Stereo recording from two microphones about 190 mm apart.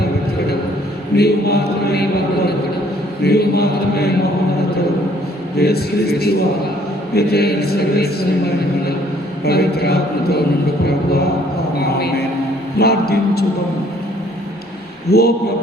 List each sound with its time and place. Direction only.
1.1 s a man's voice: 55° left (ahead or behind)
3.2 s a man's voice: 55° left (ahead or behind)
5.5 s a man's voice: 55° left (ahead or behind)
9.4 s a man's voice: 55° left (ahead or behind)
11.8 s a sound: 55° left (ahead or behind)
12.8 s a man's voice: 55° left (ahead or behind)
15.1 s a man's voice: 55° left (ahead or behind)